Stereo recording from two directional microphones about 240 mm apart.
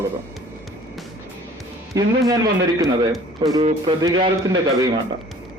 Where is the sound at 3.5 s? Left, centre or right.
Right.